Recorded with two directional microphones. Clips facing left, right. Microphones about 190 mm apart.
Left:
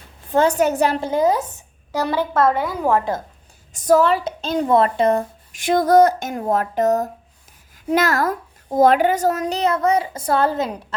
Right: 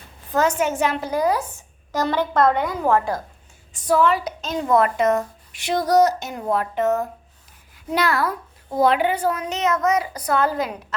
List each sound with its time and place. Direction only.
0.3 s a child's voice: 35° left (ahead or behind)
1.9 s a woman's voice: 10° left (ahead or behind)
2.9 s a woman's voice: 20° left (ahead or behind)
3.7 s a woman's voice: 40° left (ahead or behind)
5.5 s a child's voice: 50° left (ahead or behind); by 10.8 s 30° left (ahead or behind)